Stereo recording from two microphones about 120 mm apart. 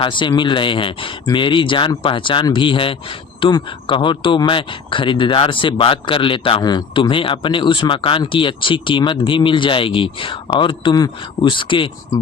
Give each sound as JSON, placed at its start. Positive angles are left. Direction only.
{"t": 0.0, "sound": "speech", "side_deg": 40}